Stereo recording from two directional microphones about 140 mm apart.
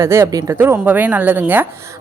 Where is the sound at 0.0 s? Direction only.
20° right (ahead or behind).